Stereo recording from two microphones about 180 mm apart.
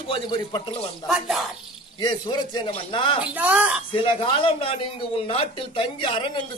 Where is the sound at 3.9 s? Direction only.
30° left (ahead or behind).